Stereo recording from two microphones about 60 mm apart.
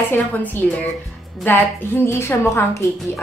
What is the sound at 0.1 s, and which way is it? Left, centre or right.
Speech, left.